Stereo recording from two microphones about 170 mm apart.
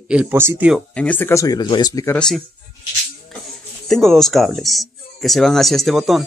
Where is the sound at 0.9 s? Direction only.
10° left (ahead or behind).